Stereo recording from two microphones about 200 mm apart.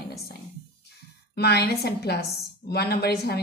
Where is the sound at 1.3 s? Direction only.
55° left (ahead or behind).